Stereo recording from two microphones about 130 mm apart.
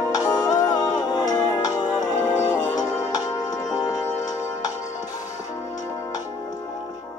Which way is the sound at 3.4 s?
30° left (ahead or behind).